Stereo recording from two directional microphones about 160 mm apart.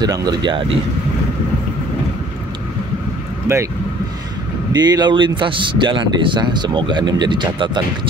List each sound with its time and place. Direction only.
0.0 s a man's voice: 25° right (ahead or behind)
3.5 s speech: 15° right (ahead or behind)
4.7 s a man's voice: 25° right (ahead or behind)